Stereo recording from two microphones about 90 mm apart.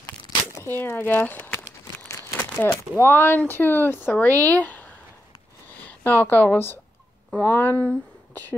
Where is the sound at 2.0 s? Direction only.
35° left (ahead or behind).